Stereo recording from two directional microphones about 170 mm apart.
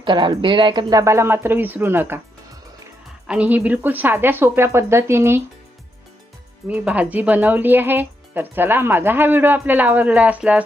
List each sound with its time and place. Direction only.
0.0 s speech: 30° right (ahead or behind); by 2.2 s 15° right (ahead or behind)
3.2 s speech: 5° right (ahead or behind)
6.7 s speech: 5° right (ahead or behind)